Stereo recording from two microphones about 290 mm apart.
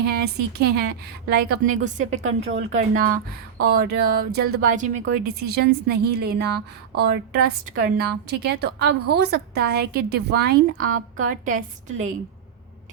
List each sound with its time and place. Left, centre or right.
0.0 s a woman's voice: right
2.2 s a woman's voice: right